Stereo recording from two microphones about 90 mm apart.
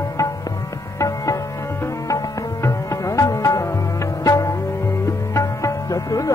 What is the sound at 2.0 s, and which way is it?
Music, 35° left (ahead or behind).